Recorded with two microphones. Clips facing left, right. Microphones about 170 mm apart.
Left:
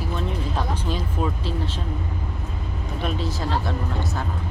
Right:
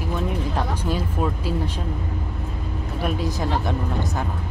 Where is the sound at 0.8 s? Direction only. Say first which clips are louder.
Right 2 dB; 10° right (ahead or behind).